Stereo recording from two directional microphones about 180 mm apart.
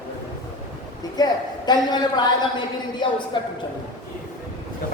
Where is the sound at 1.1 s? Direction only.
20° left (ahead or behind).